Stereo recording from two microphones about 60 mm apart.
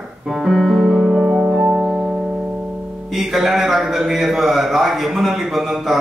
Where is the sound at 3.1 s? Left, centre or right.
Centre.